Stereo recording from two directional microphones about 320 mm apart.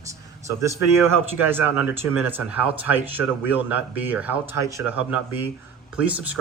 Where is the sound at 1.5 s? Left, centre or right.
Centre.